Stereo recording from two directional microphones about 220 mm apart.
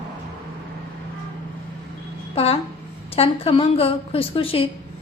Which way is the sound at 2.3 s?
25° left (ahead or behind).